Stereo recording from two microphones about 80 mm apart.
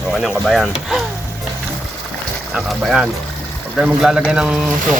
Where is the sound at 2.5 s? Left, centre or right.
Centre.